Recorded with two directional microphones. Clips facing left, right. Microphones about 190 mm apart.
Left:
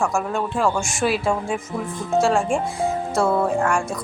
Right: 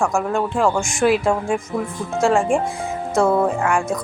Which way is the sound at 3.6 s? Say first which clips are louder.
Right 1 dB; 5° right (ahead or behind).